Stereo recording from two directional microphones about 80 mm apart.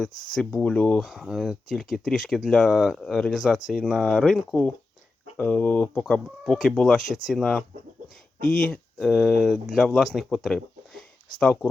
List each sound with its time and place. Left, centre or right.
0.0 s speech: centre
0.7 s speech: centre
0.9 s speech: centre
5.5 s speech: left; by 7.6 s centre
8.6 s speech: centre
11.3 s speech: centre